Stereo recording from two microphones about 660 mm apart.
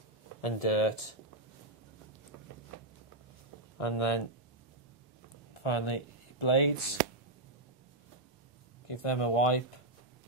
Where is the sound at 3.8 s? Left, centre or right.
Left.